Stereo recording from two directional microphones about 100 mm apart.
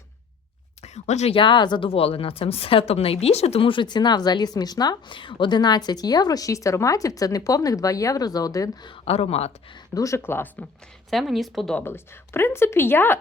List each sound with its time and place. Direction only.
0.8 s speech: 80° left; by 9.0 s 45° left (ahead or behind)
9.0 s speech: 85° left
9.9 s speech: 35° left (ahead or behind)
10.2 s speech: 20° left (ahead or behind)
11.1 s speech: centre (ahead or behind)
11.9 s speech: 25° left (ahead or behind)